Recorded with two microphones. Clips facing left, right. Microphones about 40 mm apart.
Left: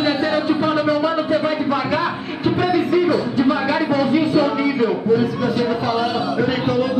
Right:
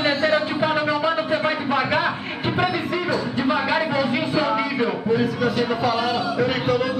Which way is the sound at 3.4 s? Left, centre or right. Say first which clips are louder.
Left 3 dB; centre.